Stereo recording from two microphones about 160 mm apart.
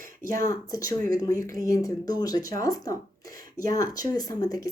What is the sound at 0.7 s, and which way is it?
Speech, 20° left (ahead or behind).